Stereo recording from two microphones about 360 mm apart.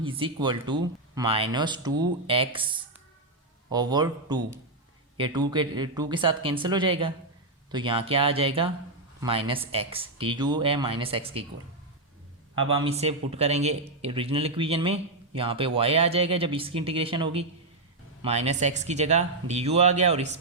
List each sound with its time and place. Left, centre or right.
0.0 s speech: centre
3.7 s speech: centre
12.8 s speech: centre